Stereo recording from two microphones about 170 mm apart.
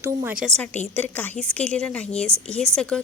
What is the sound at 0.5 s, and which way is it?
A woman's voice, 10° left (ahead or behind).